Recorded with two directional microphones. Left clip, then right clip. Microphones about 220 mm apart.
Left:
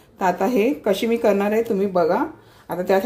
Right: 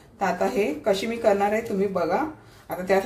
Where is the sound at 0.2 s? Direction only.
40° left (ahead or behind).